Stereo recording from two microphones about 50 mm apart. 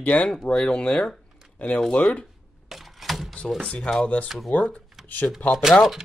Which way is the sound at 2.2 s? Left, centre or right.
Centre.